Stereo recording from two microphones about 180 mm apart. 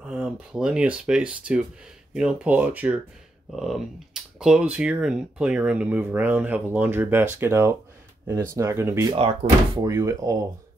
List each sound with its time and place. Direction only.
0.0 s speech: 5° right (ahead or behind)